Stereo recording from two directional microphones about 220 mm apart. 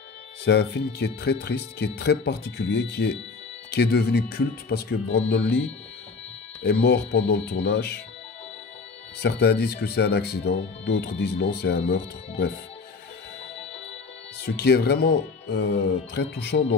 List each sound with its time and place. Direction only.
0.5 s speech: 50° left (ahead or behind)
6.6 s speech: 50° left (ahead or behind)
9.2 s speech: 50° left (ahead or behind)
14.4 s speech: 50° left (ahead or behind)